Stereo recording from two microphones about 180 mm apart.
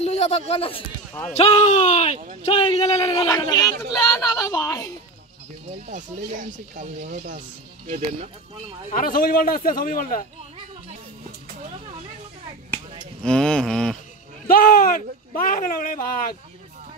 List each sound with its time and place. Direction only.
0.0 s a sound: 35° left (ahead or behind)
0.5 s speech: 30° left (ahead or behind)
3.2 s a woman's voice: 20° left (ahead or behind)
5.9 s speech: 45° right (ahead or behind)
7.8 s speech: 35° right (ahead or behind)
8.9 s speech: 50° left (ahead or behind)
13.2 s mantra: 5° left (ahead or behind)
14.5 s speech: 50° left (ahead or behind)